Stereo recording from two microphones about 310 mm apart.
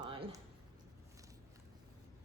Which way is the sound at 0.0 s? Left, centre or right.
Centre.